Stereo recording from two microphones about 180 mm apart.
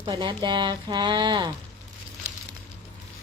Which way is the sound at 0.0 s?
25° right (ahead or behind).